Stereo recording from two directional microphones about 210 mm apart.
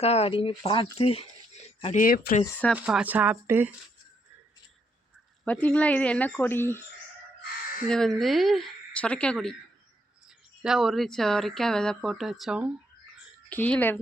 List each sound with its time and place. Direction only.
0.0 s speech: 30° left (ahead or behind); by 2.4 s 45° left (ahead or behind)
2.7 s speech: 5° right (ahead or behind)
5.5 s a woman's voice: 5° left (ahead or behind)
7.9 s speech: centre (ahead or behind)
13.5 s a woman's voice: 5° left (ahead or behind)